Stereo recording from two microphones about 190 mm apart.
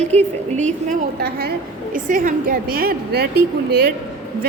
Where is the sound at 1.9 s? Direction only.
45° right (ahead or behind).